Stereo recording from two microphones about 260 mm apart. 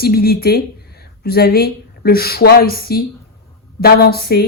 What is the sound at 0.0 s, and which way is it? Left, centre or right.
Speech, left.